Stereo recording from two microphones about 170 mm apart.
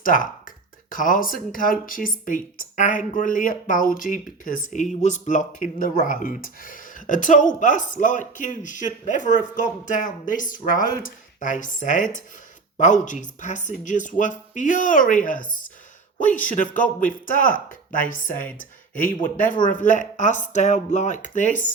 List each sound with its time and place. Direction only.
0.0 s speech: 55° left (ahead or behind)